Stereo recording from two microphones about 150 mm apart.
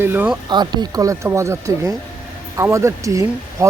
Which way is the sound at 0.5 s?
30° right (ahead or behind).